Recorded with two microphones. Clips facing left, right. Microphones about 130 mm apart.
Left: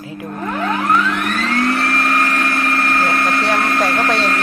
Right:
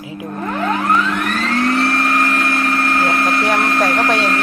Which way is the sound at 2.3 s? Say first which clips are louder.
Right 1 dB; 10° right (ahead or behind).